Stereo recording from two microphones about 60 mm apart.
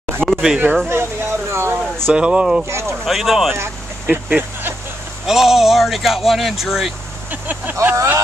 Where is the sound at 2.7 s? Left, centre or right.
Right.